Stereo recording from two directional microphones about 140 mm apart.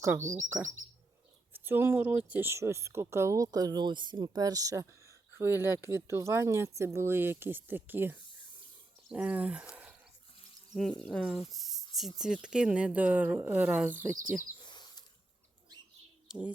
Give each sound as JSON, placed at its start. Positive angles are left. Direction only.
{"t": 0.2, "sound": "speech", "side_deg": -60}
{"t": 1.5, "sound": "speech", "side_deg": -15}
{"t": 11.0, "sound": "speech", "side_deg": 5}
{"t": 13.9, "sound": "speech", "side_deg": -70}
{"t": 14.6, "sound": "a sound", "side_deg": 30}
{"t": 16.3, "sound": "speech", "side_deg": -5}